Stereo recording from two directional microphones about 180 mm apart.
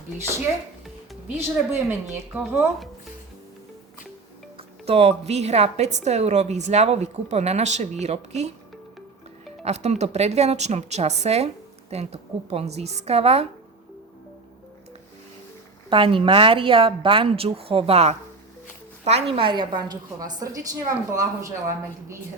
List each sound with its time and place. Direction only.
1.4 s a woman's voice: 15° right (ahead or behind)
4.5 s speech: 30° right (ahead or behind)
9.6 s speech: 40° right (ahead or behind)
15.9 s a woman's voice: 30° right (ahead or behind)